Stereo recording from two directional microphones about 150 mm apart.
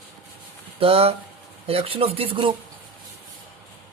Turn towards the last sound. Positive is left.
turn(degrees=-35)  # may be behind; listen again after turning